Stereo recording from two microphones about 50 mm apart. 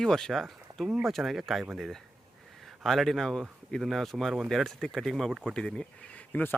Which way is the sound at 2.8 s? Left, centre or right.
Centre.